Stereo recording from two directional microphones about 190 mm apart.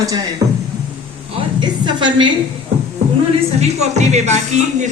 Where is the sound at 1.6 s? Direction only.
25° right (ahead or behind).